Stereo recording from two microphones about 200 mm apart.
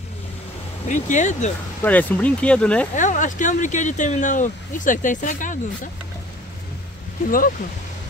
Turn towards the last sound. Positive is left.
turn(degrees=40)  # may be behind; listen again after turning